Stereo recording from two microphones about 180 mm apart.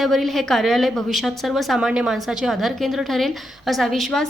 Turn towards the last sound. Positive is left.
turn(degrees=0)  # may be behind; listen again after turning